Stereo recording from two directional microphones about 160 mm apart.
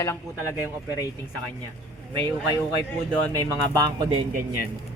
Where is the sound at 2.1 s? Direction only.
25° right (ahead or behind).